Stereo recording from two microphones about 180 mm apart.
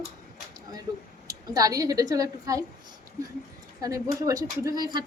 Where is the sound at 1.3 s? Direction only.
20° right (ahead or behind).